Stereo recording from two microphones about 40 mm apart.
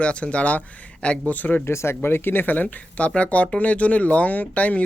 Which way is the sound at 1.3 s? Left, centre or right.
Left.